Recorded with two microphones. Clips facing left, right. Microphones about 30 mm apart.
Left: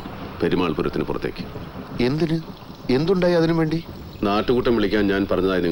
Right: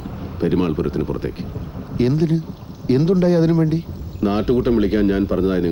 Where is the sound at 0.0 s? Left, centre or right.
Left.